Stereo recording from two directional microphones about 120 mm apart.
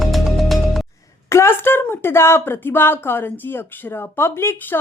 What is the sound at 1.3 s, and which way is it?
Speech, 20° left (ahead or behind).